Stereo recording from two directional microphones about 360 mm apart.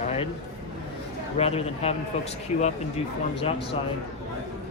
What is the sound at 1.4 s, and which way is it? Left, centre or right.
Speech, centre.